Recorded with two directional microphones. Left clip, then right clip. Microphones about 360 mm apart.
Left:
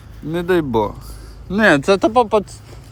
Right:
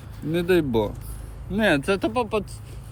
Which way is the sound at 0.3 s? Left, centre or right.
Centre.